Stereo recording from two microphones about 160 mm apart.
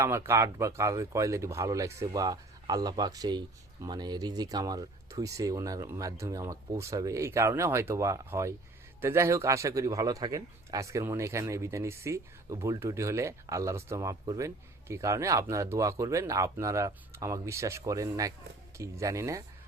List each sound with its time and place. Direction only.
0.0 s speech: 15° right (ahead or behind)